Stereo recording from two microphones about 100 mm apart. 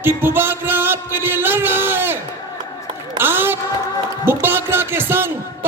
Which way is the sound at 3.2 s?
20° right (ahead or behind).